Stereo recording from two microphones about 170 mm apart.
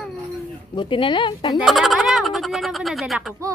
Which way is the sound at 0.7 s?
30° left (ahead or behind).